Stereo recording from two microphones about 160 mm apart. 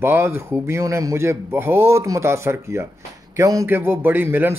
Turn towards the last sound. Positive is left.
turn(degrees=-15)  # may be behind; listen again after turning